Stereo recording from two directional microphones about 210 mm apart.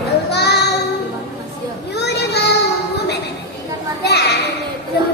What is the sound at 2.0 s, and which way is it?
Child singing, 50° left (ahead or behind).